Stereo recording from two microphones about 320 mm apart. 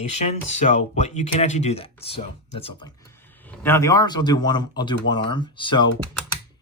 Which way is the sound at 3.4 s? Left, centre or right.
Centre.